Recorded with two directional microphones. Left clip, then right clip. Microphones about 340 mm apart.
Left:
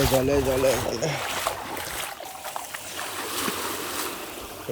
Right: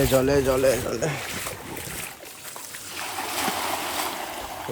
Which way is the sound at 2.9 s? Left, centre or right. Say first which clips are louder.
Right 2 dB; centre.